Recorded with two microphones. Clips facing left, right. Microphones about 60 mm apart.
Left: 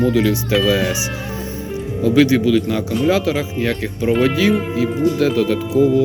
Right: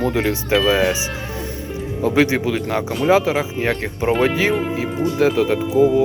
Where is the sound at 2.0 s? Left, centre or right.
Right.